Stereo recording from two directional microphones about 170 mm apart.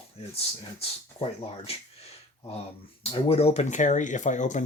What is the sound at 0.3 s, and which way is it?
Speech, 35° left (ahead or behind).